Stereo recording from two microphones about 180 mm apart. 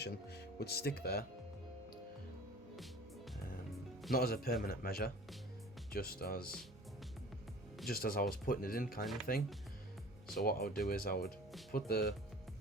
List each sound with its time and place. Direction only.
0.0 s speech: 65° left (ahead or behind)
4.1 s speech: 55° left (ahead or behind)
7.9 s speech: 55° left (ahead or behind)